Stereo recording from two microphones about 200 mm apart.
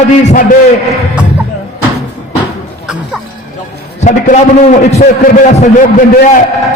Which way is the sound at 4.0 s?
35° left (ahead or behind).